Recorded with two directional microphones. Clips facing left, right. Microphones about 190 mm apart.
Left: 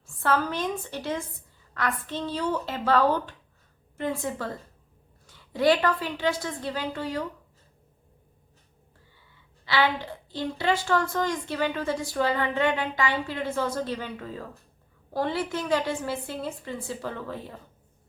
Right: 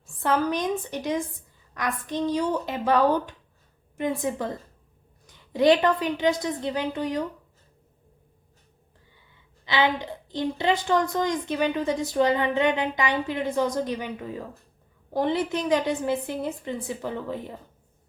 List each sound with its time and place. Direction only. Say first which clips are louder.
0.0 s a woman's voice: right 2 dB; 15° right (ahead or behind)
9.6 s a woman's voice: right 1 dB; 20° right (ahead or behind)